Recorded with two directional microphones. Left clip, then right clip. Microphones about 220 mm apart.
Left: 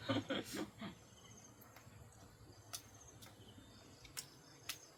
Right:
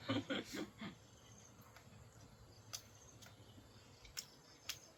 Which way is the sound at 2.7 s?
5° right (ahead or behind).